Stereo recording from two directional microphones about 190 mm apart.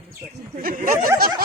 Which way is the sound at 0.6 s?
50° right (ahead or behind).